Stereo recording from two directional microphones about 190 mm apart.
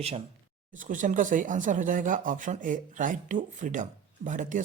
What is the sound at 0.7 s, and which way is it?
Speech, 45° right (ahead or behind).